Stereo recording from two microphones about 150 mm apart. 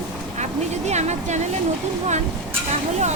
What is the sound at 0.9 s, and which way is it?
Speech, 50° right (ahead or behind).